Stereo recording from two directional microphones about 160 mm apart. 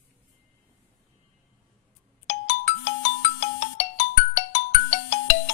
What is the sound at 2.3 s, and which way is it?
Ringtone, 45° left (ahead or behind).